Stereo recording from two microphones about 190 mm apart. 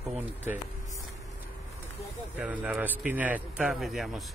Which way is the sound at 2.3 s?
5° right (ahead or behind).